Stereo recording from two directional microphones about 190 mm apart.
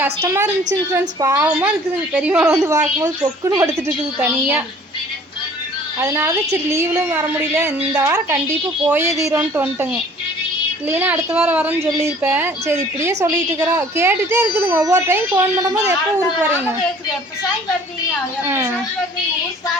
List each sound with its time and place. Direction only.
0.0 s speech: 15° right (ahead or behind)
6.0 s speech: 15° right (ahead or behind)
18.4 s speech: 10° right (ahead or behind)